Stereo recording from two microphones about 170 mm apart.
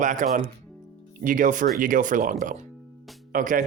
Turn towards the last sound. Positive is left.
turn(degrees=-55)  # may be behind; listen again after turning